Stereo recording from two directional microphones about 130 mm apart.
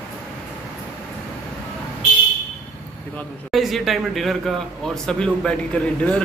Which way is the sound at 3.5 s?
Centre (ahead or behind).